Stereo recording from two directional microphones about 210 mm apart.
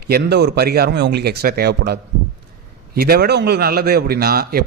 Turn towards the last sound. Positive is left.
turn(degrees=-45)  # may be behind; listen again after turning